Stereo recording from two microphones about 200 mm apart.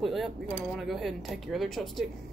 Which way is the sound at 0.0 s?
Centre (ahead or behind).